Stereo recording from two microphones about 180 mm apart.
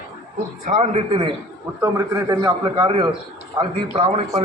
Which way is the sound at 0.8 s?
30° right (ahead or behind).